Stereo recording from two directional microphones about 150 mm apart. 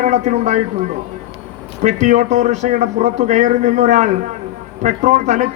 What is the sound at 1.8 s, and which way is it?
A man's voice, 50° right (ahead or behind).